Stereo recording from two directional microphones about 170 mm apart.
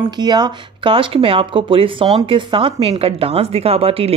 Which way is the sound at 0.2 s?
25° right (ahead or behind).